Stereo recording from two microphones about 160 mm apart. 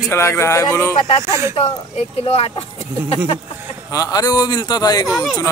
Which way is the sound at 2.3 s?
40° left (ahead or behind).